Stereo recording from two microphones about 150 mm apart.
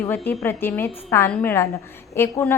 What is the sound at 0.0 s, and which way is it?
A woman's voice, 15° left (ahead or behind).